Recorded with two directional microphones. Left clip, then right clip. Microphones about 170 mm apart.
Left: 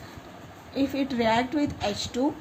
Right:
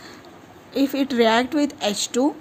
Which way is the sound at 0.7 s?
50° right (ahead or behind).